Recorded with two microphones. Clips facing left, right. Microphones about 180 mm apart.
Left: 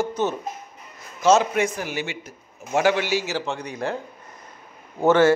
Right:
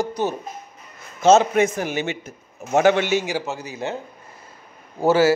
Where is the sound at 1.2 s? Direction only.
25° right (ahead or behind).